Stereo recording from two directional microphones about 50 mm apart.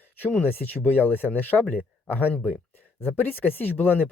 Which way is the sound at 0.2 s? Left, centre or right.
Left.